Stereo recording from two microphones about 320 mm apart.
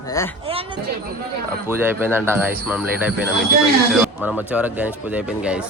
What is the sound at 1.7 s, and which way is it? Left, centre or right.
A man's voice, centre.